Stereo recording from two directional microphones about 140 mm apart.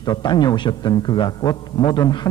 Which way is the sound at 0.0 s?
30° left (ahead or behind).